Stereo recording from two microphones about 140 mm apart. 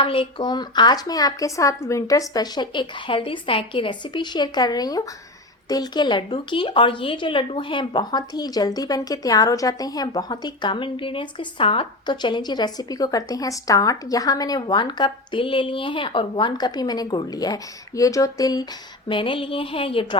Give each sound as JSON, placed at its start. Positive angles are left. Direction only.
{"t": 0.0, "sound": "a woman's voice", "side_deg": 40}
{"t": 19.0, "sound": "speech", "side_deg": 35}